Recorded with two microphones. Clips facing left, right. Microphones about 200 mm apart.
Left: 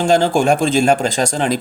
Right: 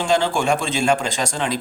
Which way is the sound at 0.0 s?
40° left (ahead or behind).